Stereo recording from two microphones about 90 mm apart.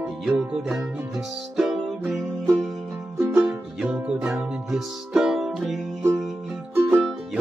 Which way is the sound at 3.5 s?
5° right (ahead or behind).